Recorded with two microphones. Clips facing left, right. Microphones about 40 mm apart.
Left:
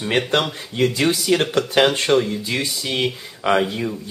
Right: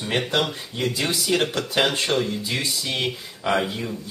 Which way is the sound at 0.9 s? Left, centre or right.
Left.